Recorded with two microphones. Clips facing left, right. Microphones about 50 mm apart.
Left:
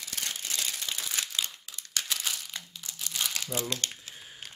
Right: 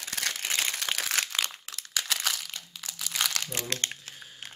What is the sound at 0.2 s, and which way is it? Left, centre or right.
Crumpling, right.